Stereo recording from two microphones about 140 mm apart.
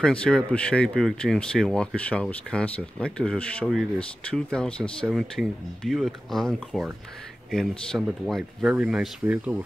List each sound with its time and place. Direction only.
0.0 s speech: 5° left (ahead or behind); by 9.6 s 10° right (ahead or behind)